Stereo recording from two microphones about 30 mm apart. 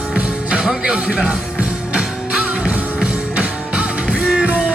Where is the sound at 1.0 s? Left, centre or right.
Right.